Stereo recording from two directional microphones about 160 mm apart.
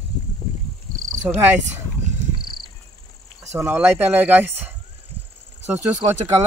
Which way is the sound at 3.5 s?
15° right (ahead or behind).